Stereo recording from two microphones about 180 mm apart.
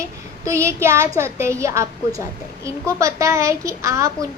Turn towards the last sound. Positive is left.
turn(degrees=-15)  # may be behind; listen again after turning